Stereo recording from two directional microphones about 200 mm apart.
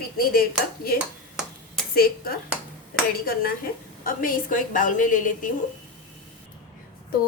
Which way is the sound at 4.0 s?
45° left (ahead or behind).